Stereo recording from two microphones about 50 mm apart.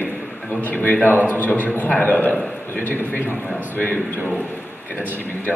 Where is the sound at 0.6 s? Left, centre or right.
Left.